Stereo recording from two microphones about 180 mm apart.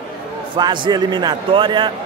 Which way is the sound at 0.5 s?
25° right (ahead or behind).